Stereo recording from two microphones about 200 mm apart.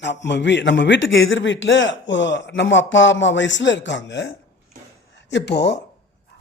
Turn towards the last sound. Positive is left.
turn(degrees=60)  # may be behind; listen again after turning